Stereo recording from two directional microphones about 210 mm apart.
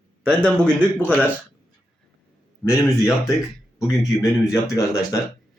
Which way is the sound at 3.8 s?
15° left (ahead or behind).